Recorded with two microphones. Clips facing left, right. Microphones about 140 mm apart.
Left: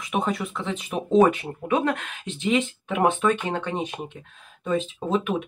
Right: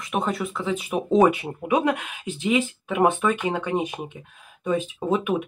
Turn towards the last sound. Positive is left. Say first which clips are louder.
# right 1 dB
turn(degrees=-10)  # may be behind; listen again after turning